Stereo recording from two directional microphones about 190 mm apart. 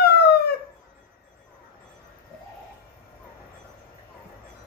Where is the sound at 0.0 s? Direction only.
55° left (ahead or behind).